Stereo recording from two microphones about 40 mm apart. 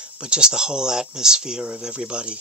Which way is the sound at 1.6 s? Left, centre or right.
Right.